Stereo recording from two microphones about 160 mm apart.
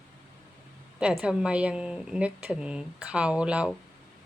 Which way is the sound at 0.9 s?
5° right (ahead or behind).